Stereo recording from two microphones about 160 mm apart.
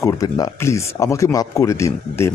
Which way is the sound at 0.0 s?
20° left (ahead or behind).